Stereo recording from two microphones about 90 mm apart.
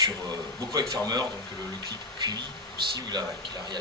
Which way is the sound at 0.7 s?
45° right (ahead or behind).